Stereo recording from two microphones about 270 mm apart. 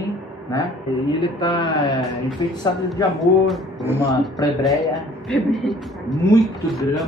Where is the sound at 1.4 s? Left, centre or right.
Centre.